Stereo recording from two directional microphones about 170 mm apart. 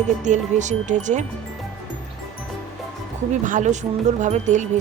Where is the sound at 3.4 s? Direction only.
45° right (ahead or behind).